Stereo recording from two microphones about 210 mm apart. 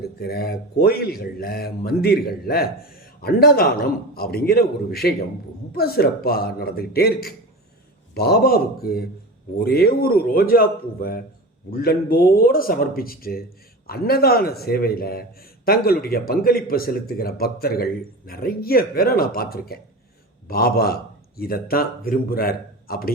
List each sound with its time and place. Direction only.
0.0 s a man's voice: 50° left (ahead or behind)